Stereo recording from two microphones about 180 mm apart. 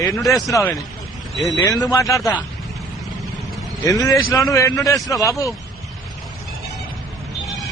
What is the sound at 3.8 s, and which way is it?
A man's voice, 20° left (ahead or behind).